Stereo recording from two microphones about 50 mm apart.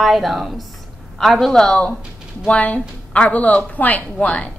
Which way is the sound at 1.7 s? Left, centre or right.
Left.